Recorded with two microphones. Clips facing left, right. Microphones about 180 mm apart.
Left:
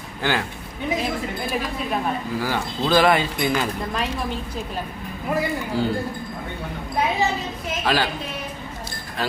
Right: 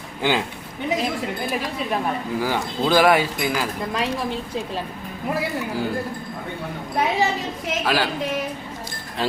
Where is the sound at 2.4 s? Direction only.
15° right (ahead or behind).